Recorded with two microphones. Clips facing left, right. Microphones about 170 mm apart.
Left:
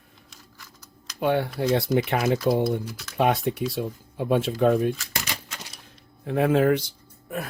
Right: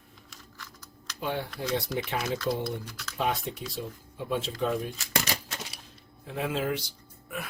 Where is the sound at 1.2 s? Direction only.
65° left (ahead or behind).